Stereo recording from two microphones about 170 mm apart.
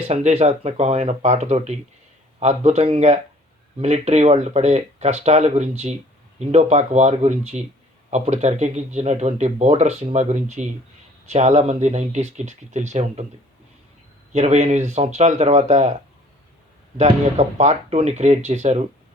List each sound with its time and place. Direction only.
0.1 s speech: 40° right (ahead or behind)
14.3 s speech: 40° right (ahead or behind)
17.0 s speech: 45° right (ahead or behind)